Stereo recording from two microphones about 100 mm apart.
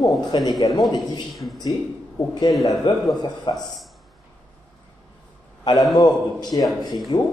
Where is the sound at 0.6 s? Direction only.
45° left (ahead or behind).